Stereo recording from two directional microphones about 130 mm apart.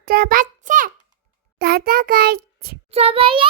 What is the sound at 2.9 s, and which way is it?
Speech, 50° right (ahead or behind).